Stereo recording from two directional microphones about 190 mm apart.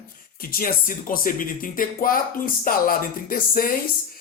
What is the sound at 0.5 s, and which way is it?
Speech, 50° left (ahead or behind).